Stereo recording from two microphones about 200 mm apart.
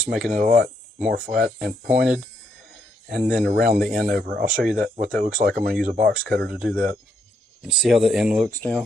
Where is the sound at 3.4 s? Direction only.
50° right (ahead or behind).